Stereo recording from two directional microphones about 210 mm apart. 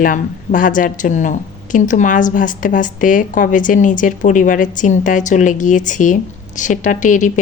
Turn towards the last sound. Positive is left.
turn(degrees=35)  # may be behind; listen again after turning